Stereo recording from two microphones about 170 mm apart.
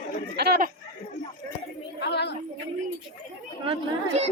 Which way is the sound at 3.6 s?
35° right (ahead or behind).